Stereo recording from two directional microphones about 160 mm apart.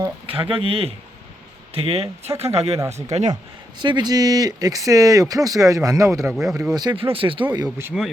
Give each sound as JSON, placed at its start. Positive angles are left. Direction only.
{"t": 0.3, "sound": "speech", "side_deg": -35}
{"t": 3.8, "sound": "speech", "side_deg": -30}
{"t": 6.3, "sound": "speech", "side_deg": 0}
{"t": 6.7, "sound": "speech", "side_deg": -30}